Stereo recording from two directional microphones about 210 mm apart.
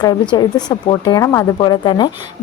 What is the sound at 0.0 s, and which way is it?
A woman's voice, 20° left (ahead or behind).